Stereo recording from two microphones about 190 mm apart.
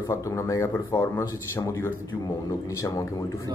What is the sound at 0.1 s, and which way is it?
Speech, 15° left (ahead or behind).